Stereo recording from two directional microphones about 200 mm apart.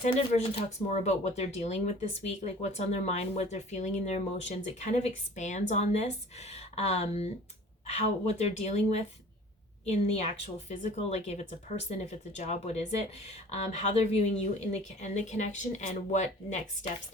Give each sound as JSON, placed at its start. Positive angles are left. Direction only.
{"t": 0.1, "sound": "speech", "side_deg": 30}